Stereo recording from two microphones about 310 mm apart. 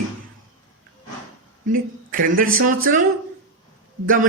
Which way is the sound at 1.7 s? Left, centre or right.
Right.